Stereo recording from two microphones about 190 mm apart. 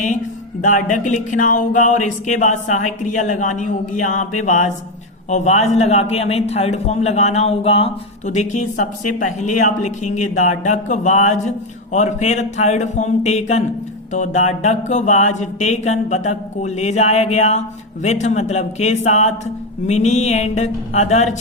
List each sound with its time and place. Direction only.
0.6 s a man's voice: 40° left (ahead or behind)